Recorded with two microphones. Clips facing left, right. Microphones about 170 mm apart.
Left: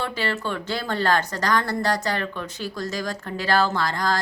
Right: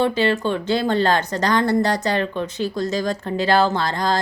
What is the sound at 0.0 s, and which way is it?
Speech, 20° right (ahead or behind).